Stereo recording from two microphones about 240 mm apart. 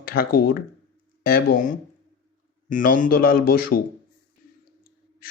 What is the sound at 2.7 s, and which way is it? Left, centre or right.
Speech, left.